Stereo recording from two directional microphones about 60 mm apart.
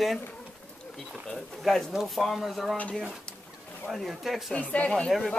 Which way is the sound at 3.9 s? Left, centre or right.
Centre.